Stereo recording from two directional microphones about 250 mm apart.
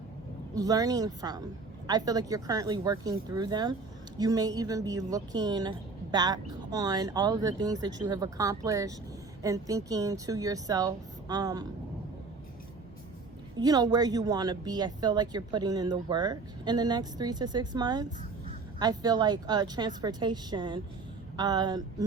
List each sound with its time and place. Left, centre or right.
0.5 s speech: centre
13.6 s speech: centre